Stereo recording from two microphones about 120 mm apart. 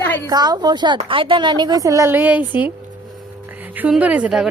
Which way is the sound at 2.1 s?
15° right (ahead or behind).